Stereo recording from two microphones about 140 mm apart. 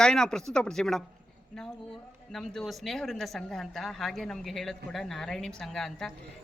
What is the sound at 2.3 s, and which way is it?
Speech, centre (ahead or behind).